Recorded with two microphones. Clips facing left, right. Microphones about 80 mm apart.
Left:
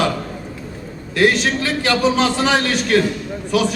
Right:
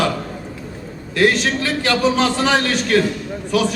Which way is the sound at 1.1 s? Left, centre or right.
Centre.